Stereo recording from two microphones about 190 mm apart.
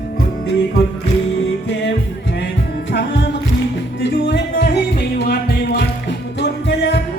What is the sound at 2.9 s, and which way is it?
Music, 60° left (ahead or behind).